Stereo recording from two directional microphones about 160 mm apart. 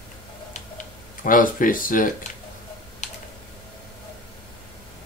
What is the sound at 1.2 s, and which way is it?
Speech, 55° left (ahead or behind).